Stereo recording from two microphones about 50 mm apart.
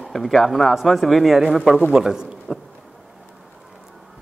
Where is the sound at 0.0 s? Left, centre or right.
Centre.